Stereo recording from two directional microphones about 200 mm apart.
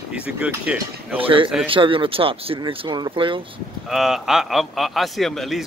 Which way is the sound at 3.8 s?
Centre (ahead or behind).